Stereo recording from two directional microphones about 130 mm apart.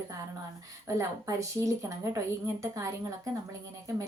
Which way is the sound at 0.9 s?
25° right (ahead or behind).